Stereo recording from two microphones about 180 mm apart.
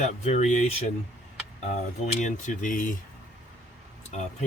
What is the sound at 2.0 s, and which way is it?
Speech, 45° left (ahead or behind).